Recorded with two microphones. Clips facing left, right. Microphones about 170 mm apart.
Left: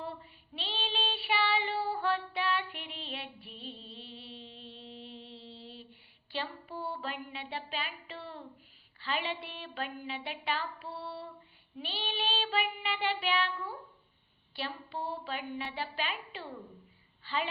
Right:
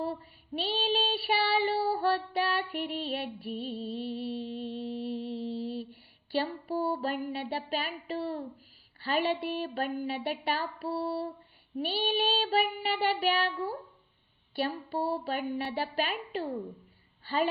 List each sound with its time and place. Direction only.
0.0 s child singing: 40° right (ahead or behind)
3.8 s mantra: 45° right (ahead or behind)
6.3 s music: 40° right (ahead or behind)
9.0 s a woman's voice: 45° right (ahead or behind)